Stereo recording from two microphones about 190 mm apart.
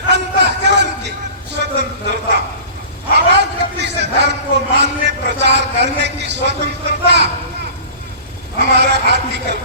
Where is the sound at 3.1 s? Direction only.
65° right (ahead or behind).